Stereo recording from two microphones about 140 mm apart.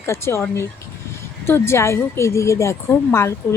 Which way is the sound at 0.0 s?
20° left (ahead or behind).